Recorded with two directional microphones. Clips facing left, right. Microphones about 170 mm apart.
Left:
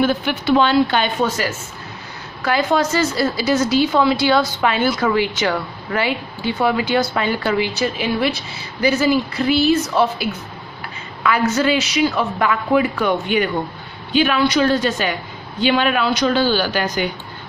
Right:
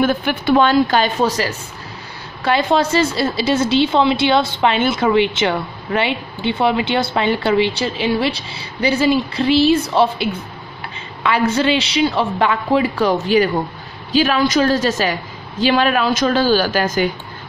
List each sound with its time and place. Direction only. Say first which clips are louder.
0.0 s a woman's voice: right 1 dB; 55° right (ahead or behind)